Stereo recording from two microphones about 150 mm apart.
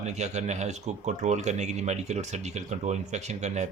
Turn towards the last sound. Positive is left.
turn(degrees=-50)  # may be behind; listen again after turning